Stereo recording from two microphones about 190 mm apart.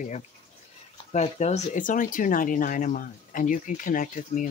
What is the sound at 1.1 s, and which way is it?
Speech, 35° left (ahead or behind).